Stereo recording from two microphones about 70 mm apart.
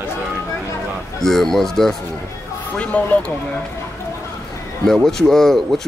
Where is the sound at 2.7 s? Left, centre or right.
Centre.